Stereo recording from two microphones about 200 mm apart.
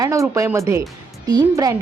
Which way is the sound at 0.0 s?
15° right (ahead or behind).